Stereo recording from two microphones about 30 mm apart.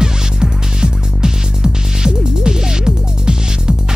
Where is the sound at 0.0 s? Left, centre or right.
Right.